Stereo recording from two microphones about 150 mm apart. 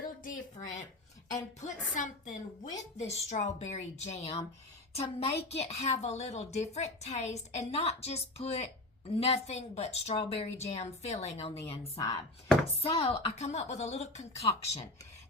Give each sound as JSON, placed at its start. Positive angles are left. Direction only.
{"t": 0.2, "sound": "a woman's voice", "side_deg": 60}
{"t": 3.0, "sound": "a woman's voice", "side_deg": 45}